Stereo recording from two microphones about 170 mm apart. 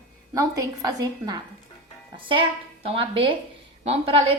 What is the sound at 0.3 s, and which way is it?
A woman's voice, 20° right (ahead or behind).